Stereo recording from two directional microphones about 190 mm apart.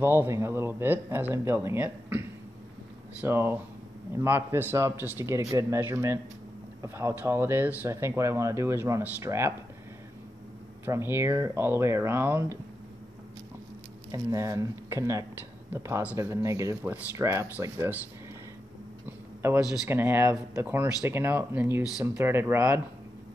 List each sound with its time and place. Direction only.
0.0 s speech: 10° right (ahead or behind)
10.9 s speech: 10° right (ahead or behind)
14.1 s speech: 15° right (ahead or behind)
19.4 s speech: 10° right (ahead or behind)